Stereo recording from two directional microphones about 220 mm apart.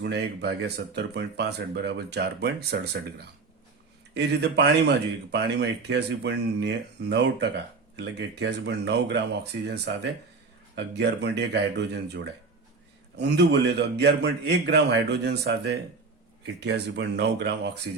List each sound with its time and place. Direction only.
0.0 s speech: 50° right (ahead or behind)